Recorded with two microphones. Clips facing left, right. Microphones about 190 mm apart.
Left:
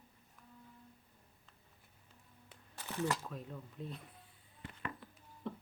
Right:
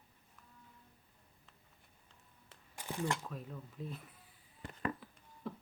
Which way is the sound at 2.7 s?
15° right (ahead or behind).